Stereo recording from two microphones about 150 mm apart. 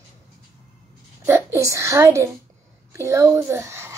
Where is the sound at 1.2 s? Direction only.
15° right (ahead or behind).